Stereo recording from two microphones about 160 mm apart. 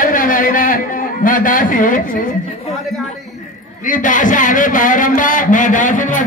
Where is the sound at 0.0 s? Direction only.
55° left (ahead or behind).